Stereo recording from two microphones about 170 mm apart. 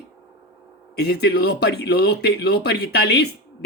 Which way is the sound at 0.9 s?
75° left (ahead or behind).